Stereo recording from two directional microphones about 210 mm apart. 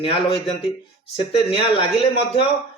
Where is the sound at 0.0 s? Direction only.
25° left (ahead or behind).